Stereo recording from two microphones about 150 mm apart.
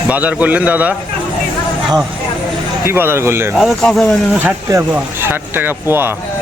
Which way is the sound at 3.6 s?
Centre (ahead or behind).